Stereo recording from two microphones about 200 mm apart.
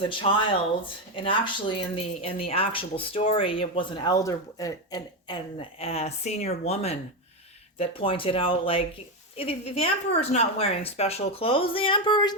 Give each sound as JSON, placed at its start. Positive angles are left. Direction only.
{"t": 0.0, "sound": "speech", "side_deg": 25}
{"t": 5.8, "sound": "speech", "side_deg": 30}